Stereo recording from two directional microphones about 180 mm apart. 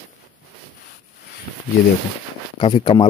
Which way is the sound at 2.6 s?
25° left (ahead or behind).